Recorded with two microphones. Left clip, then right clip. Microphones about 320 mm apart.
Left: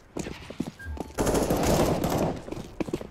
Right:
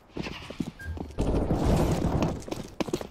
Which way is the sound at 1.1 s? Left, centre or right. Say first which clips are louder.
Left 5 dB; left.